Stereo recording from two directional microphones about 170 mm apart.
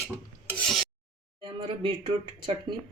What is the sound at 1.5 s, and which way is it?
Speech, 30° right (ahead or behind).